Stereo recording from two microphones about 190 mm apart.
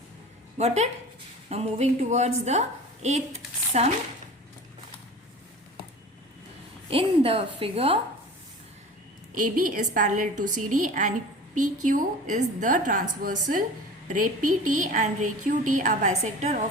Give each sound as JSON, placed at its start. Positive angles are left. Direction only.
{"t": 0.5, "sound": "a woman's voice", "side_deg": -35}
{"t": 6.9, "sound": "a woman's voice", "side_deg": -30}
{"t": 9.3, "sound": "a woman's voice", "side_deg": -45}